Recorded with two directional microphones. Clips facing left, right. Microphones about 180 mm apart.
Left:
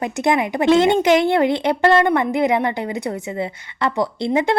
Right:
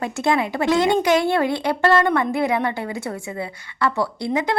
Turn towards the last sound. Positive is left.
turn(degrees=25)  # may be behind; listen again after turning